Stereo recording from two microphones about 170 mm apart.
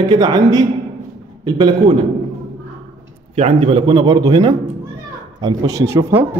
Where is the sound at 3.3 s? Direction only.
35° right (ahead or behind); by 6.3 s 15° right (ahead or behind).